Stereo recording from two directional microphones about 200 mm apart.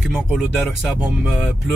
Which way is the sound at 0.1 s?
5° right (ahead or behind).